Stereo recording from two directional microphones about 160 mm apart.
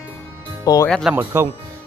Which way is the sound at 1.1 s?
15° right (ahead or behind).